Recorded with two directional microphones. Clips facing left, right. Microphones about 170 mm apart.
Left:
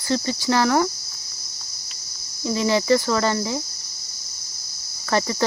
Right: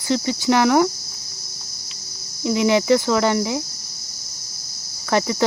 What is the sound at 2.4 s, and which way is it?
Speech, 15° right (ahead or behind).